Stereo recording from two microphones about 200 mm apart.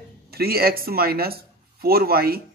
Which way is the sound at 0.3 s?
50° right (ahead or behind).